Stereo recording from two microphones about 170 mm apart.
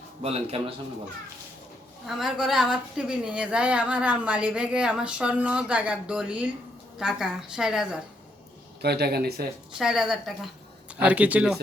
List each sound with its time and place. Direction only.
0.2 s a man's voice: 35° right (ahead or behind)
2.0 s a woman's voice: centre (ahead or behind)
8.8 s speech: 70° right (ahead or behind)
9.7 s speech: 5° right (ahead or behind)